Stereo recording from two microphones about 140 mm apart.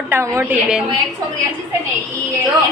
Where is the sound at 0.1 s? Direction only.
20° right (ahead or behind).